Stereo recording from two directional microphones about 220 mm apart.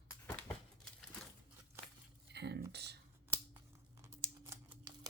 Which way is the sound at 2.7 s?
50° right (ahead or behind).